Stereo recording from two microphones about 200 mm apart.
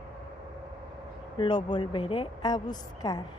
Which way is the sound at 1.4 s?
20° left (ahead or behind).